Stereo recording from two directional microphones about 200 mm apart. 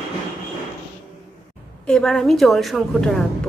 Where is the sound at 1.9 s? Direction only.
5° left (ahead or behind).